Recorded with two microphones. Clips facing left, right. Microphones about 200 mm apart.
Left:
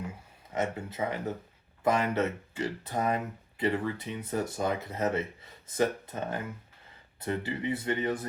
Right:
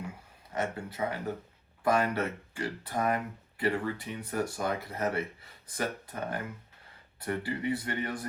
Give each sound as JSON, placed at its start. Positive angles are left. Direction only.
{"t": 0.6, "sound": "speech", "side_deg": 20}